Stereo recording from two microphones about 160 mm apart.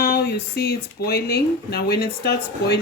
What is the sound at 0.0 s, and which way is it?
Speech, 80° left.